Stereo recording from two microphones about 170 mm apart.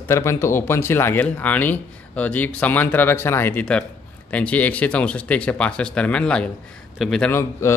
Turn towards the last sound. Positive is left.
turn(degrees=15)  # may be behind; listen again after turning